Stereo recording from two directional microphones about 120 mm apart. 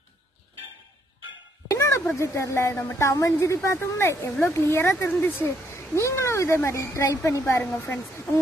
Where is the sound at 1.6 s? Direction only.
25° left (ahead or behind).